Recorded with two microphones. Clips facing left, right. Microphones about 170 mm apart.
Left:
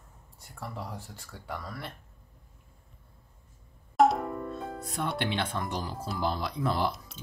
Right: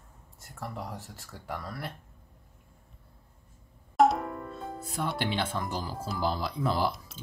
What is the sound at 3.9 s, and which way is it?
Music, centre (ahead or behind).